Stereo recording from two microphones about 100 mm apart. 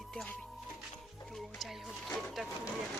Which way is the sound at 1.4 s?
Centre (ahead or behind).